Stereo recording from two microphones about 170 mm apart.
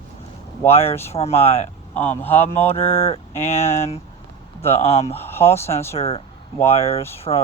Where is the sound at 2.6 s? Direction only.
35° left (ahead or behind).